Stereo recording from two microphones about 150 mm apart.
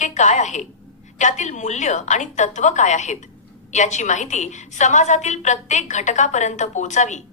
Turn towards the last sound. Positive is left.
turn(degrees=50)  # may be behind; listen again after turning